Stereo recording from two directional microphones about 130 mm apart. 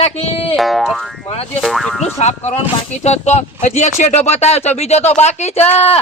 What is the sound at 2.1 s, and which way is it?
Speech, 60° left (ahead or behind).